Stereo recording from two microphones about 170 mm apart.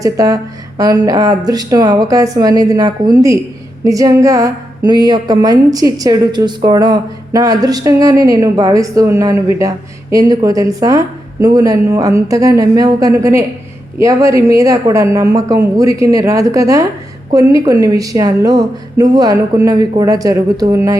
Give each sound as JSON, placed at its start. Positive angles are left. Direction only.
{"t": 0.0, "sound": "a woman's voice", "side_deg": -20}